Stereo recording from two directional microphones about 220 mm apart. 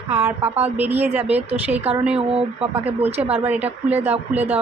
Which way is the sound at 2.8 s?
10° right (ahead or behind).